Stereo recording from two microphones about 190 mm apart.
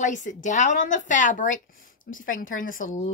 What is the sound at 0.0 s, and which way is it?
A woman's voice, 40° left (ahead or behind).